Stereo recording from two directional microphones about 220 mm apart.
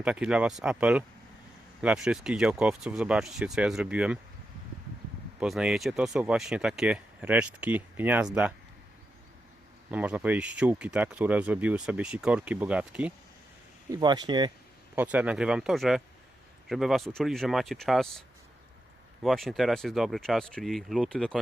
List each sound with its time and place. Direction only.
0.0 s speech: 5° right (ahead or behind)
5.4 s speech: 5° right (ahead or behind)
9.9 s speech: 5° right (ahead or behind)
13.9 s speech: 20° right (ahead or behind)
14.9 s speech: 5° right (ahead or behind)
19.2 s speech: centre (ahead or behind)